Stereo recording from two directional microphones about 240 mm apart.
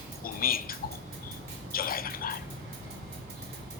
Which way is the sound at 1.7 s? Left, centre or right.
Left.